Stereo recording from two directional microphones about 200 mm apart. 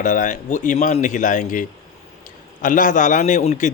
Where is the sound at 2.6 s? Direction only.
40° left (ahead or behind).